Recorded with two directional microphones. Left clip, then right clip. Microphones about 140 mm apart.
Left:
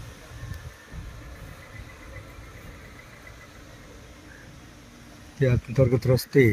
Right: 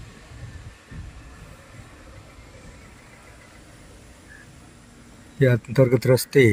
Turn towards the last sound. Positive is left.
turn(degrees=-35)  # may be behind; listen again after turning